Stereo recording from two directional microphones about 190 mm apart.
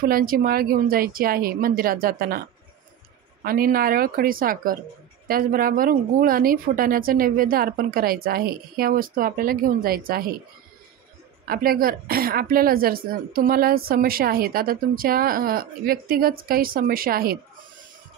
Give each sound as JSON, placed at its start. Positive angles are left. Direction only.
{"t": 0.0, "sound": "a woman's voice", "side_deg": -50}
{"t": 3.4, "sound": "a woman's voice", "side_deg": -50}
{"t": 11.4, "sound": "a woman's voice", "side_deg": -50}